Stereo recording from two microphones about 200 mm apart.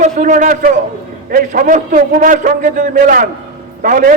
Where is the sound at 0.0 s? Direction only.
40° right (ahead or behind).